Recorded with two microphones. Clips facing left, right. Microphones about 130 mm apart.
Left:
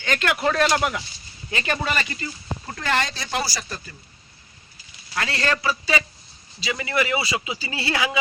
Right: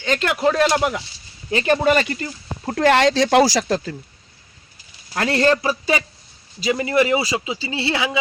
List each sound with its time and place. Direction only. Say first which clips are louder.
0.0 s a man's voice: right 4 dB; 25° right (ahead or behind)
0.4 s a man's voice: right 4 dB; 15° right (ahead or behind)
1.5 s speech: right 8 dB; 35° right (ahead or behind)
2.0 s speech: right 4 dB; 55° right (ahead or behind); by 3.9 s 90° right
5.1 s a man's voice: right 8 dB; 45° right (ahead or behind); by 8.2 s 25° right (ahead or behind)